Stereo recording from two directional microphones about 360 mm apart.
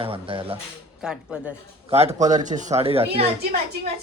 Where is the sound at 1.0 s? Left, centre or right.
Centre.